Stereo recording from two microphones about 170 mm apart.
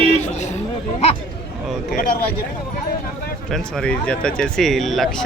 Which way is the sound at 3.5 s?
5° left (ahead or behind).